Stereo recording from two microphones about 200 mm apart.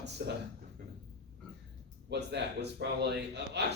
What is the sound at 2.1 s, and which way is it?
A man's voice, 55° right (ahead or behind).